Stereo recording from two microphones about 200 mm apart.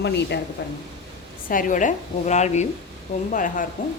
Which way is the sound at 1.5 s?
40° left (ahead or behind).